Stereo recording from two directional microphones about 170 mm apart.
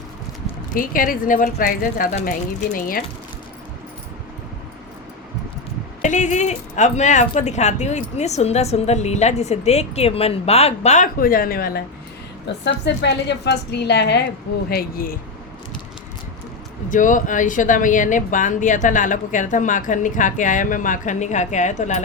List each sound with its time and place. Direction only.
0.7 s speech: 55° left (ahead or behind)
6.0 s speech: 45° left (ahead or behind)
12.6 s a woman's voice: 90° left
14.7 s speech: 60° left (ahead or behind)
16.9 s speech: 50° left (ahead or behind)